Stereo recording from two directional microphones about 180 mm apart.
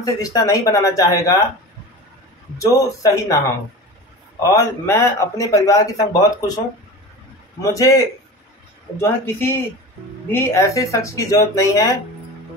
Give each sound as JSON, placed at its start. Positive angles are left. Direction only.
{"t": 0.0, "sound": "speech", "side_deg": 20}
{"t": 2.6, "sound": "speech", "side_deg": 20}
{"t": 4.4, "sound": "a man's voice", "side_deg": 15}
{"t": 7.6, "sound": "a man's voice", "side_deg": 20}